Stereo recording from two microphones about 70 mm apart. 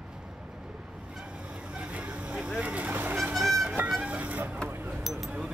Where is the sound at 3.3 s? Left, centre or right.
Centre.